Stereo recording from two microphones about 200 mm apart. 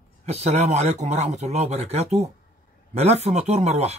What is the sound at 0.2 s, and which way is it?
Speech, 35° right (ahead or behind).